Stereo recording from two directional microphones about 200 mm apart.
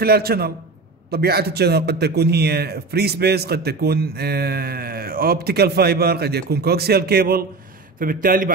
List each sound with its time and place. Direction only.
0.0 s speech: 50° right (ahead or behind)